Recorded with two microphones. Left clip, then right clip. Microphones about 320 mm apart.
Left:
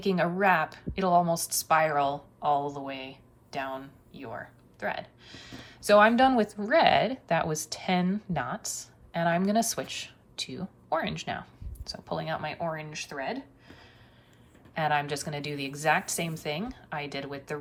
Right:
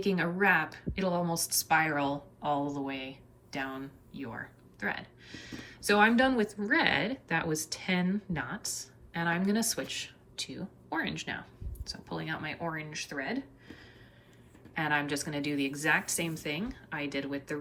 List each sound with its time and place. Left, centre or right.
0.0 s a woman's voice: centre